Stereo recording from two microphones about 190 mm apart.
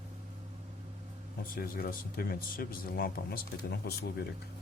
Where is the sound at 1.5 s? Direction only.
50° left (ahead or behind).